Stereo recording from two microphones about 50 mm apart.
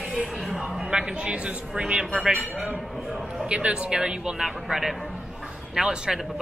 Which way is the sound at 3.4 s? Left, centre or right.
Right.